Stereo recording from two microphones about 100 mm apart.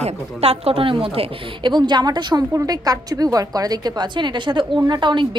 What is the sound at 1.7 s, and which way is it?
Speech, 50° right (ahead or behind).